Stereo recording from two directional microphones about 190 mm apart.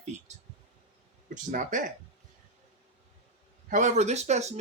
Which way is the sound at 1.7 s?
45° right (ahead or behind).